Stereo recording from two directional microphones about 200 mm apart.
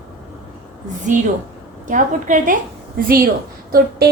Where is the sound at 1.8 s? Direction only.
40° right (ahead or behind).